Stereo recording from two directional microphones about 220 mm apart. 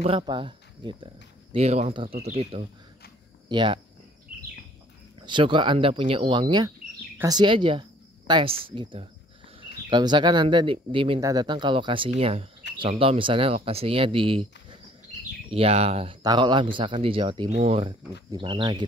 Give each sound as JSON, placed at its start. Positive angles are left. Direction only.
{"t": 0.0, "sound": "speech", "side_deg": -20}
{"t": 5.2, "sound": "speech", "side_deg": -20}